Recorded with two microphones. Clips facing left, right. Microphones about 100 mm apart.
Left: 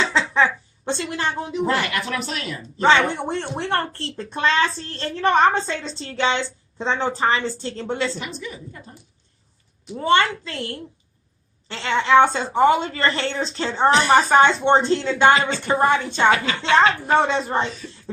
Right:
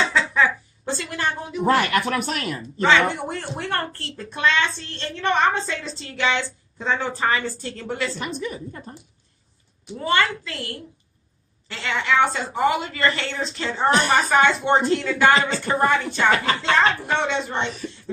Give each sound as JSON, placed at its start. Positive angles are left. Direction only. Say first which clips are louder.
{"t": 0.1, "sound": "a sound", "louder": "left 1 dB", "side_deg": 25}
{"t": 2.0, "sound": "a woman's voice", "louder": "right 3 dB", "side_deg": -50}
{"t": 2.8, "sound": "speech", "louder": "left 2 dB", "side_deg": 30}
{"t": 8.2, "sound": "a woman's voice", "louder": "right 4 dB", "side_deg": -45}
{"t": 9.9, "sound": "speech", "louder": "left 3 dB", "side_deg": 30}
{"t": 16.3, "sound": "a woman's voice", "louder": "even", "side_deg": -40}
{"t": 16.7, "sound": "a woman's voice", "louder": "left 7 dB", "side_deg": 40}